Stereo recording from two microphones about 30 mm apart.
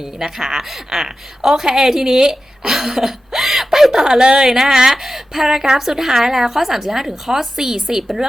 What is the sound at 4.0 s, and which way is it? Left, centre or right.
A woman's voice, right.